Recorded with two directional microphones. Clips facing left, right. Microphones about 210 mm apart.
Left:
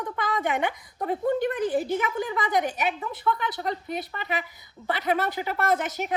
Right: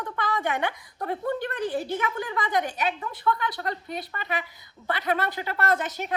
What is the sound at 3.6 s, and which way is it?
A child's voice, 5° left (ahead or behind).